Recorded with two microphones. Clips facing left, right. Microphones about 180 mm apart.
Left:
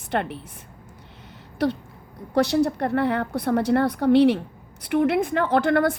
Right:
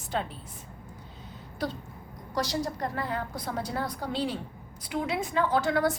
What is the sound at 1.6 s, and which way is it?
A woman's voice, 75° left (ahead or behind).